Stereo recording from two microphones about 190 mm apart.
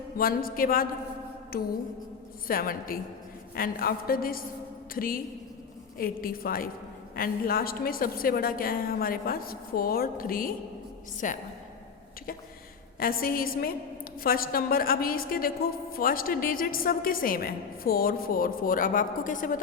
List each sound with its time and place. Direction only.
0.2 s a woman's voice: 50° left (ahead or behind)
2.5 s a woman's voice: 50° left (ahead or behind)
13.0 s a woman's voice: 50° left (ahead or behind)